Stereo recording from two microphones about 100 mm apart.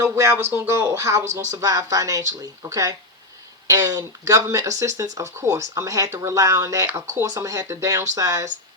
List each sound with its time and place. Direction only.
0.0 s speech: 30° right (ahead or behind)